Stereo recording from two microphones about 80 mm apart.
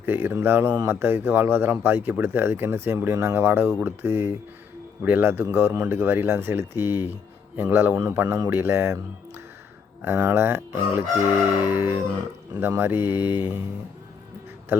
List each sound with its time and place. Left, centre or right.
0.0 s speech: right
7.9 s speech: right
8.4 s speech: right